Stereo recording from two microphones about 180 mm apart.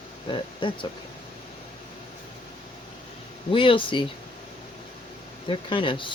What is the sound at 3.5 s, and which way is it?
Speech, 30° left (ahead or behind).